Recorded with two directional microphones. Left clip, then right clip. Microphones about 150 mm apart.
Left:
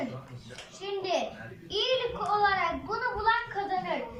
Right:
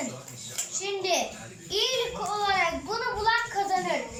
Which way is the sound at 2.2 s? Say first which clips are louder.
Even; 15° right (ahead or behind).